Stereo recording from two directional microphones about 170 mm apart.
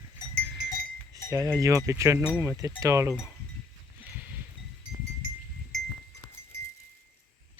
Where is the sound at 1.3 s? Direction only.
15° right (ahead or behind).